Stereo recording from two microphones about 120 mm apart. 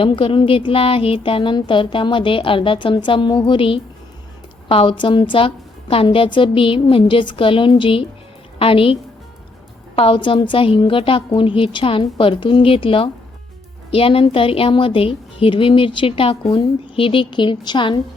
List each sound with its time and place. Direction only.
0.0 s a woman's voice: 45° left (ahead or behind)
10.0 s a woman's voice: 45° left (ahead or behind)